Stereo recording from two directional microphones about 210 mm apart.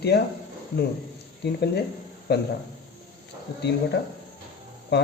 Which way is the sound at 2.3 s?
50° left (ahead or behind).